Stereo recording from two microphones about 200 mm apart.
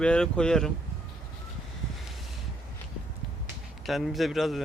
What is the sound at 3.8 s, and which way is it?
Speech, centre (ahead or behind).